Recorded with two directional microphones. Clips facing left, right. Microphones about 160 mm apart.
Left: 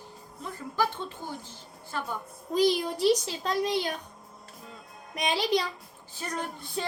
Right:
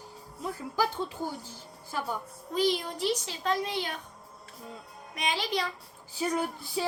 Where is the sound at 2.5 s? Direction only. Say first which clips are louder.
Left 3 dB; 35° left (ahead or behind).